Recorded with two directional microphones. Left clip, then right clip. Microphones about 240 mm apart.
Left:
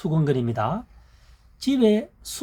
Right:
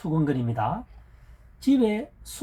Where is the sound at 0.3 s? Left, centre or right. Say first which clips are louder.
Left 4 dB; left.